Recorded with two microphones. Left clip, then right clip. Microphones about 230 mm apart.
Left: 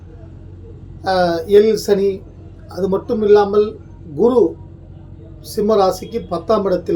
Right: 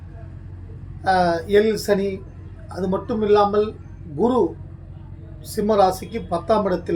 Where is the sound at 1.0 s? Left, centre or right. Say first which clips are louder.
Left 2 dB; centre.